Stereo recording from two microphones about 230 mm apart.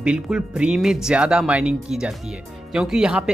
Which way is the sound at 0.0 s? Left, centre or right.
Centre.